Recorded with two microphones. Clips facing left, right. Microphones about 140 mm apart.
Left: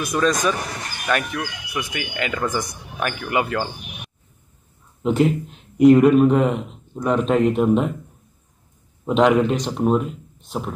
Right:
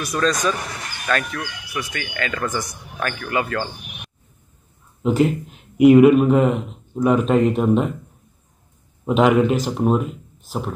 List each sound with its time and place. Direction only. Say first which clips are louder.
0.0 s a man's voice: left 1 dB; 20° left (ahead or behind)
5.0 s speech: even; centre (ahead or behind)
9.0 s speech: right 1 dB; centre (ahead or behind)